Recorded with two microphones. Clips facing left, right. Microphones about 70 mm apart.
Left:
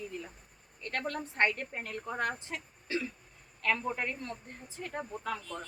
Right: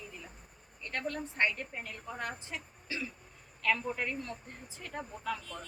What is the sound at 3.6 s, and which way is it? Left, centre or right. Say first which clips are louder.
Speech: even; left.